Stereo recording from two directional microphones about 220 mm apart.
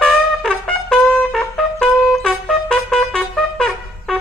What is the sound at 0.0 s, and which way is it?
Trumpet, 5° left (ahead or behind).